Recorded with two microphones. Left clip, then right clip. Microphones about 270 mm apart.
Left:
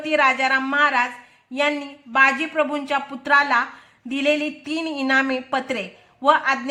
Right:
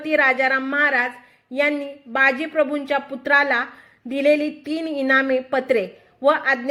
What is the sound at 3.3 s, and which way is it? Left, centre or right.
A woman's voice, centre.